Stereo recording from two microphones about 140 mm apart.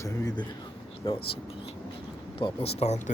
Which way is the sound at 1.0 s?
40° left (ahead or behind).